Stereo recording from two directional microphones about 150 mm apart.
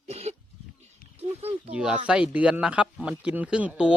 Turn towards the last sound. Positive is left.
turn(degrees=-5)  # may be behind; listen again after turning